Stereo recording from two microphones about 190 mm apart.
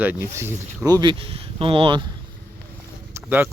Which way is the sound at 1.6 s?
25° right (ahead or behind).